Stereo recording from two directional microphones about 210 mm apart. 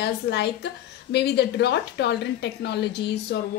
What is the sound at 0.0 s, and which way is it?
Speech, 55° left (ahead or behind).